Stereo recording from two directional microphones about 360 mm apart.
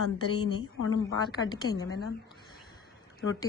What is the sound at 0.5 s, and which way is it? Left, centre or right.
Speech, left.